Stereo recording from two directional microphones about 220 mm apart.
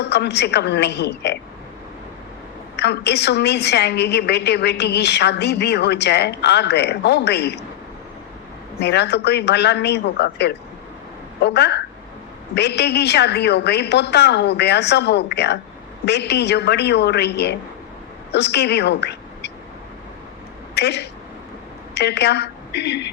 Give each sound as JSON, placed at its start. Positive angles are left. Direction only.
{"t": 0.0, "sound": "a woman's voice", "side_deg": 50}
{"t": 2.7, "sound": "a woman's voice", "side_deg": 50}
{"t": 8.8, "sound": "a woman's voice", "side_deg": 50}
{"t": 20.7, "sound": "a woman's voice", "side_deg": 50}